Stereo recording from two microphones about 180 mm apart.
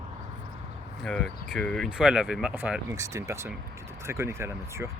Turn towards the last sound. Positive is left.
turn(degrees=-15)  # may be behind; listen again after turning